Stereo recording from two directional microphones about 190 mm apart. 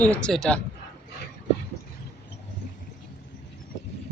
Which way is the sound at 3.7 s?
65° left (ahead or behind).